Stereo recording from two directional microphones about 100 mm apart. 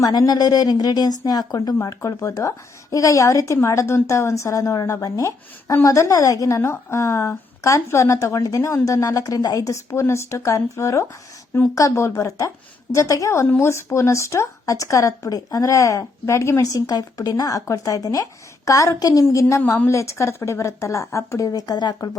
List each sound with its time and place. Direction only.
0.0 s speech: 35° left (ahead or behind)